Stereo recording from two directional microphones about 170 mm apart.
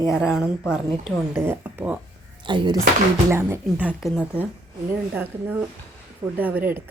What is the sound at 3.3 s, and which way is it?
Speech, 15° right (ahead or behind).